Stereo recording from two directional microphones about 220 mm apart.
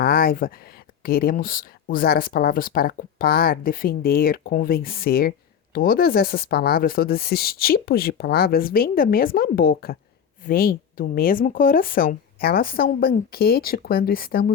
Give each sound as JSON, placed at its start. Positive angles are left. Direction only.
{"t": 0.0, "sound": "speech", "side_deg": 40}